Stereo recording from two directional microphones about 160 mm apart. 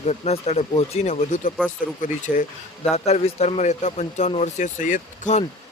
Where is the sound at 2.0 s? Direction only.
55° left (ahead or behind).